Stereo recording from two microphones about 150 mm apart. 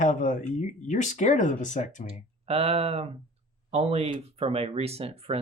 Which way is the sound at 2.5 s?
45° right (ahead or behind).